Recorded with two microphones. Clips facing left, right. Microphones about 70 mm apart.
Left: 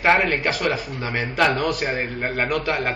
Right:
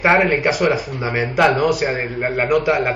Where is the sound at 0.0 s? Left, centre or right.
Centre.